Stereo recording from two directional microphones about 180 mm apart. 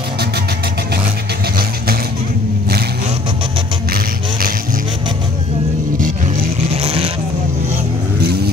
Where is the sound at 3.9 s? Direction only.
55° right (ahead or behind).